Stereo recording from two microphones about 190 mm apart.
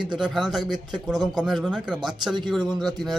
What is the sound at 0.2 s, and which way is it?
Speech, centre (ahead or behind).